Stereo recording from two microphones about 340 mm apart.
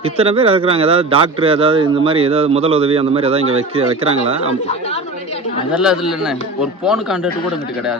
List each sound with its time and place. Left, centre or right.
0.0 s speech: centre
5.8 s speech: centre